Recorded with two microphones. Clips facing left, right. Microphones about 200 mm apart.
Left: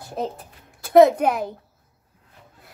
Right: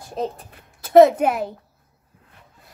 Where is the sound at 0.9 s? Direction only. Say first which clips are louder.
Right 1 dB; 5° right (ahead or behind).